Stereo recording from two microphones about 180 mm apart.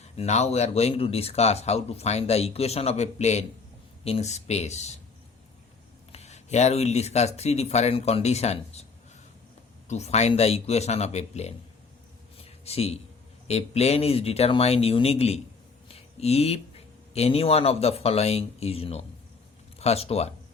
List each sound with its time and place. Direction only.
0.2 s speech: 35° left (ahead or behind)
6.1 s speech: 35° left (ahead or behind)
9.9 s speech: 40° left (ahead or behind)
12.4 s a sound: 35° left (ahead or behind)
13.5 s speech: 35° left (ahead or behind)